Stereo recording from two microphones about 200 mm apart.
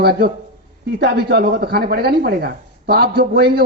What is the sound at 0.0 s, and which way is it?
A man's voice, 50° right (ahead or behind).